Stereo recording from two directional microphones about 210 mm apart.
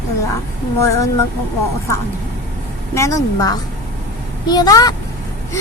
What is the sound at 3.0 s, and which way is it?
A woman's voice, 15° left (ahead or behind).